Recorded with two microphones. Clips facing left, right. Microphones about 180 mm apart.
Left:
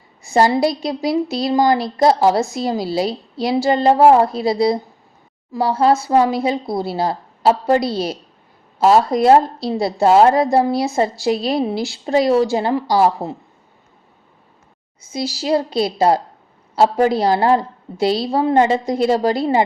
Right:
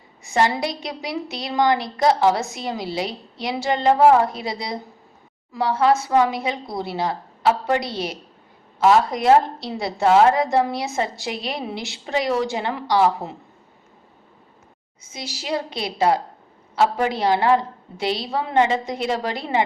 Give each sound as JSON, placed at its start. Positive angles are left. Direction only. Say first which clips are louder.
{"t": 0.3, "sound": "a woman's voice", "louder": "left 6 dB", "side_deg": 35}
{"t": 15.1, "sound": "a woman's voice", "louder": "left 8 dB", "side_deg": 35}